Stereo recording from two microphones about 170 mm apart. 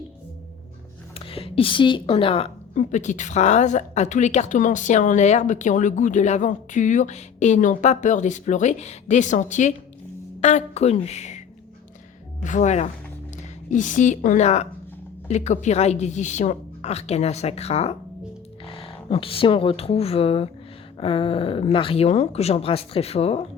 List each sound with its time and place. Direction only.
1.1 s a woman's voice: 35° left (ahead or behind)